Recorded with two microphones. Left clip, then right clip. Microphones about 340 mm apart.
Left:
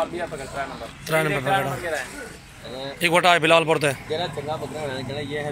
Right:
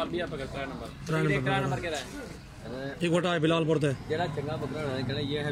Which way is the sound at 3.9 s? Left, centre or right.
Left.